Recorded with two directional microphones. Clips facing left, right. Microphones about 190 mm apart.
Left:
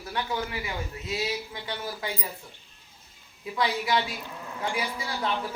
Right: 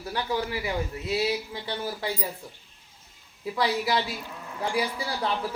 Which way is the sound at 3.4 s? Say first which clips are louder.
Right 2 dB; 35° right (ahead or behind).